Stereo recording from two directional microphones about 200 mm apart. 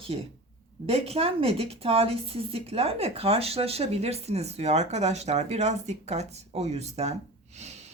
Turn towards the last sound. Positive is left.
turn(degrees=-35)  # may be behind; listen again after turning